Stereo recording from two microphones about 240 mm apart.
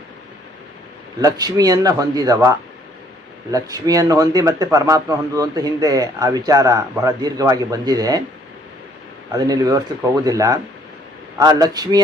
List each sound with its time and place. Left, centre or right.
1.2 s speech: centre
9.3 s speech: centre